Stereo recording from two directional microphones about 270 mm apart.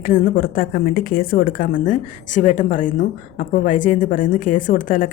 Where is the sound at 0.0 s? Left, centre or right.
Left.